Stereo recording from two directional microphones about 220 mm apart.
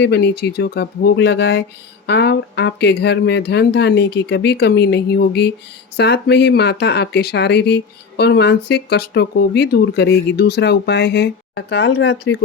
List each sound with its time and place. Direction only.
0.0 s speech: 50° left (ahead or behind)